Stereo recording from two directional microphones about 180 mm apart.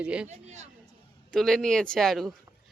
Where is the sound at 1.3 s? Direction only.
5° left (ahead or behind).